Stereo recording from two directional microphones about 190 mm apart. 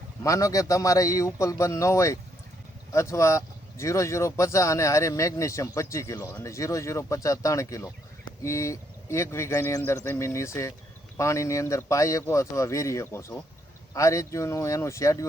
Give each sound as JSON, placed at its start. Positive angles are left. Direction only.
{"t": 0.2, "sound": "speech", "side_deg": 15}